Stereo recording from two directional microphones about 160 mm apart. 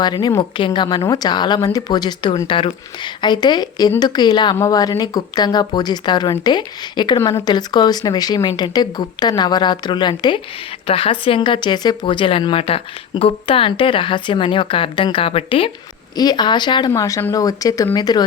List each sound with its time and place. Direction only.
0.0 s speech: 25° left (ahead or behind)